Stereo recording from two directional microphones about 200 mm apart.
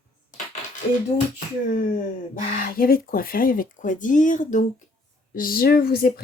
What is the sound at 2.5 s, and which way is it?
Speech, 45° left (ahead or behind).